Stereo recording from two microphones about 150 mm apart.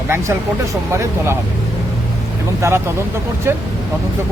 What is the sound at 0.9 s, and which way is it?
Speech, 15° right (ahead or behind).